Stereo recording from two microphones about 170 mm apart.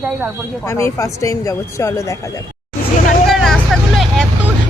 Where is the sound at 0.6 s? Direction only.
15° left (ahead or behind).